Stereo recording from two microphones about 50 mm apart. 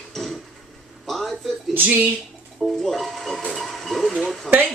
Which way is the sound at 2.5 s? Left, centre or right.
Centre.